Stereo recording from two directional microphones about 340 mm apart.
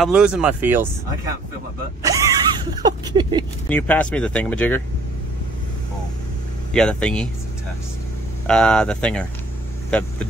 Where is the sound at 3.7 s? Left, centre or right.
Centre.